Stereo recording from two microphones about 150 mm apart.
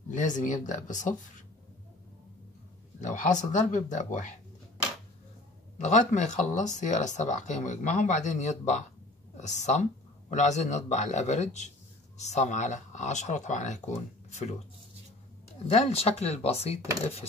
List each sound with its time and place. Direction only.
0.1 s speech: 60° left (ahead or behind)
3.0 s speech: 55° left (ahead or behind)
5.9 s speech: 50° left (ahead or behind)
15.7 s speech: 45° left (ahead or behind)